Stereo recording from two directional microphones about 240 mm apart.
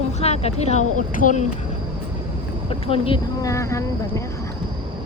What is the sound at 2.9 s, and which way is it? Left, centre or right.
Speech, centre.